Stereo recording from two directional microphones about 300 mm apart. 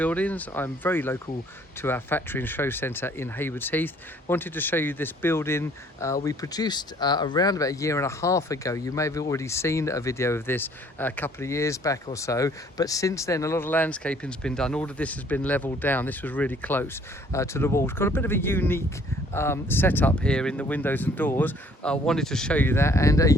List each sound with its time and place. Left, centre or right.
0.0 s speech: centre